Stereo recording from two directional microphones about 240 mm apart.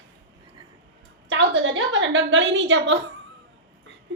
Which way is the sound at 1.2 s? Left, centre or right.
Right.